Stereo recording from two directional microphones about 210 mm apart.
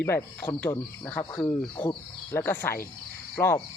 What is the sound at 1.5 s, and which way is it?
Speech, 20° left (ahead or behind).